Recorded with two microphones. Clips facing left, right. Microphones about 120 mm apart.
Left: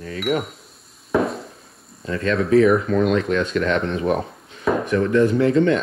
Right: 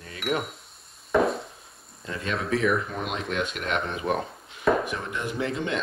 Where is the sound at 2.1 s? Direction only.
60° left (ahead or behind).